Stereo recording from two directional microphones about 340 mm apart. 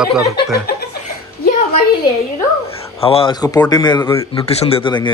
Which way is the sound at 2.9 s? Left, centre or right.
Centre.